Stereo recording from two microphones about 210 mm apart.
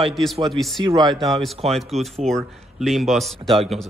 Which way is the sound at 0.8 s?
20° right (ahead or behind).